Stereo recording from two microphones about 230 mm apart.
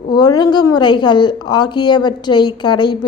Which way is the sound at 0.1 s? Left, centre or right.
Centre.